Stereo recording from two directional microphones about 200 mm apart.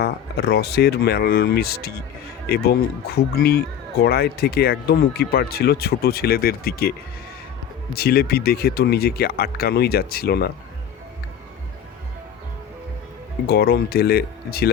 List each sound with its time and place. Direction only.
0.0 s speech: 50° left (ahead or behind)
7.9 s speech: 50° left (ahead or behind)
13.5 s speech: 55° left (ahead or behind)